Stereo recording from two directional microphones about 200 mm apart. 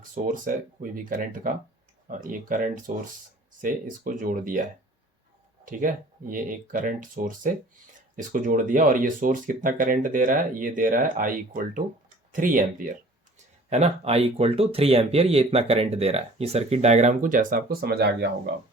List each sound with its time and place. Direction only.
0.1 s speech: 40° right (ahead or behind)
5.6 s speech: 40° right (ahead or behind)
13.7 s speech: 35° right (ahead or behind); by 18.3 s 55° right (ahead or behind)